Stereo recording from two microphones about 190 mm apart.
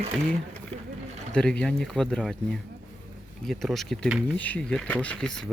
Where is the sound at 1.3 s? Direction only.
5° left (ahead or behind).